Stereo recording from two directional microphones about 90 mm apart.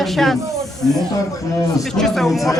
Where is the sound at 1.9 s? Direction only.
5° left (ahead or behind).